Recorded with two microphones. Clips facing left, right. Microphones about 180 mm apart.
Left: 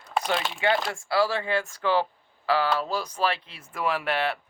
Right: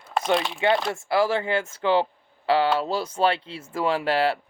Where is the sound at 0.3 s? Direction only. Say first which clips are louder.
Right 4 dB; centre (ahead or behind).